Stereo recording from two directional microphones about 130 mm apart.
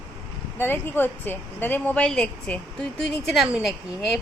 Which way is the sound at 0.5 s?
15° left (ahead or behind).